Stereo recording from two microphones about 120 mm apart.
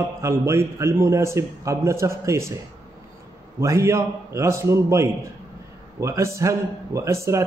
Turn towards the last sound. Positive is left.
turn(degrees=-25)  # may be behind; listen again after turning